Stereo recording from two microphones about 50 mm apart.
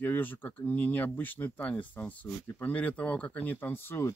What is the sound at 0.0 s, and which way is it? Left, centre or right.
Speech, left.